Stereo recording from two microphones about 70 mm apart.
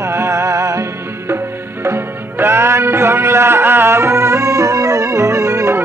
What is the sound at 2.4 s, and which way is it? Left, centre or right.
Music, right.